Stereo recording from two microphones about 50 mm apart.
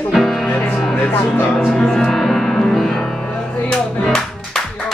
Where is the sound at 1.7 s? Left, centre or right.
Centre.